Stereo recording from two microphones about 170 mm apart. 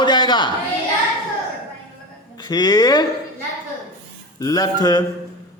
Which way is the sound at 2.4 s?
25° left (ahead or behind).